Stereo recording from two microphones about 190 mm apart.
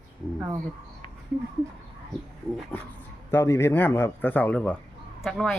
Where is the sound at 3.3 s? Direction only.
15° left (ahead or behind).